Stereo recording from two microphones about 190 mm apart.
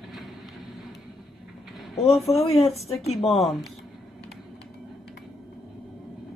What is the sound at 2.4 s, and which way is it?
Speech, 30° left (ahead or behind).